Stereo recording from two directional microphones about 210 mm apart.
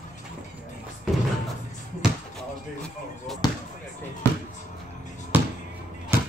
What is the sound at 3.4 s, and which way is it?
Basketball bounce, 20° left (ahead or behind).